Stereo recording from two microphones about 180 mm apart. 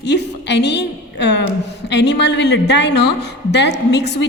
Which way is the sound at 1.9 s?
70° left (ahead or behind).